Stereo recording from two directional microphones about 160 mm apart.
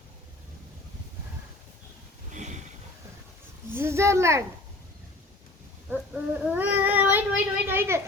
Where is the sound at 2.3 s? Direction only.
50° right (ahead or behind).